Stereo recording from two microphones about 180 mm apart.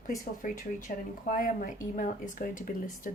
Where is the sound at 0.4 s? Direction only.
50° left (ahead or behind).